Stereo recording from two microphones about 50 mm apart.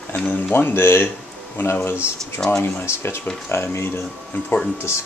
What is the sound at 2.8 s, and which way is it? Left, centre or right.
Speech, left.